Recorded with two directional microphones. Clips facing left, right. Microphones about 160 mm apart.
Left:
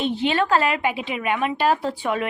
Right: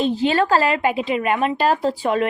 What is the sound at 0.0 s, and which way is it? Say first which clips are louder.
A woman's voice: right 3 dB; 40° right (ahead or behind).